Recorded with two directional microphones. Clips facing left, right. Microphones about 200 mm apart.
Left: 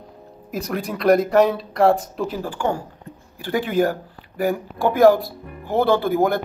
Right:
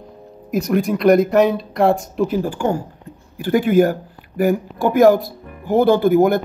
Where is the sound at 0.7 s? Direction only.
50° right (ahead or behind).